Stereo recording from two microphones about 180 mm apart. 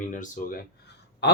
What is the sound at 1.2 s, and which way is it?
Speech, 70° left (ahead or behind).